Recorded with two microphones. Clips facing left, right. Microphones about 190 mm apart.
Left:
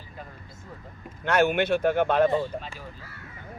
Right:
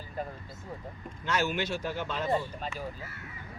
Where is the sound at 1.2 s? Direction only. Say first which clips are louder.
Left 8 dB; 60° left (ahead or behind).